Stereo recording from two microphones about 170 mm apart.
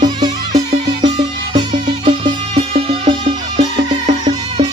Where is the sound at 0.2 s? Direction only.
40° right (ahead or behind).